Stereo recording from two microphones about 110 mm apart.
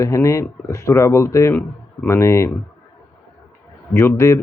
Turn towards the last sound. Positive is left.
turn(degrees=25)  # may be behind; listen again after turning